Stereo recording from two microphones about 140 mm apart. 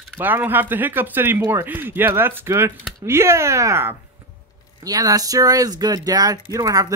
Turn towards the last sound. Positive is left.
turn(degrees=-25)  # may be behind; listen again after turning